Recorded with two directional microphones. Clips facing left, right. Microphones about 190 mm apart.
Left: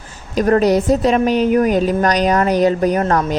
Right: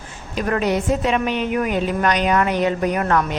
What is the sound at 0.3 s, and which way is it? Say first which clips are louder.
A woman's voice: left 7 dB; 40° left (ahead or behind).